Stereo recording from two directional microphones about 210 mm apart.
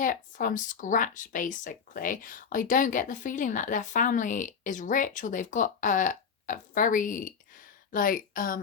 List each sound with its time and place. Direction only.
0.0 s speech: 40° left (ahead or behind)